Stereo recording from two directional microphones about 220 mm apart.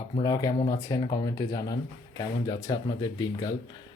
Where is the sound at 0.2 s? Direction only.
15° left (ahead or behind).